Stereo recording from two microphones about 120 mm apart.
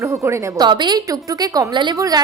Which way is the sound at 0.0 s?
25° right (ahead or behind).